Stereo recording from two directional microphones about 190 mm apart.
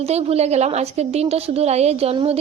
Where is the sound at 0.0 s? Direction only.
30° right (ahead or behind).